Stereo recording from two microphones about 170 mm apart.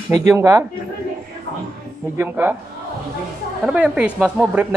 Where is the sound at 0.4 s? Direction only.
20° right (ahead or behind).